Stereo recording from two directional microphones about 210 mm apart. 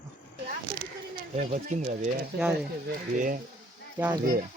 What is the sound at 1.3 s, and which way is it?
Speech, 35° right (ahead or behind).